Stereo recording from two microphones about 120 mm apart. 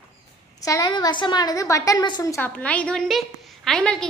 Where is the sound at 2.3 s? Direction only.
10° left (ahead or behind).